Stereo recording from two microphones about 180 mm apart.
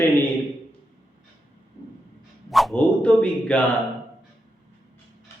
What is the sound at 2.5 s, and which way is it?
Speech, centre (ahead or behind).